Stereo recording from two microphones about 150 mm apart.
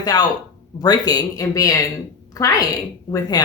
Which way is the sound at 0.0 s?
25° left (ahead or behind).